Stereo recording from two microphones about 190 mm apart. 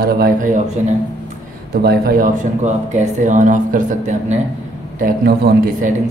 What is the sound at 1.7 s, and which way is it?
A man's voice, 55° right (ahead or behind).